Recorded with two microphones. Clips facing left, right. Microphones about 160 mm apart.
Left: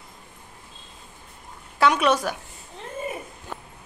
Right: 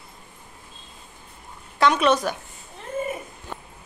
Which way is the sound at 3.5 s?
5° left (ahead or behind).